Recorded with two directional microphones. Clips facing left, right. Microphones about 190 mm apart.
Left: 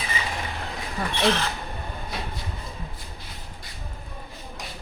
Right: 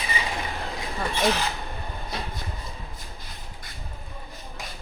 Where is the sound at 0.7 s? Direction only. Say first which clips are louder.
Right 1 dB; 15° right (ahead or behind).